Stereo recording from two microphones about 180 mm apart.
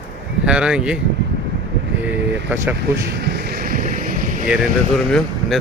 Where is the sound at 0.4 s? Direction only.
5° right (ahead or behind).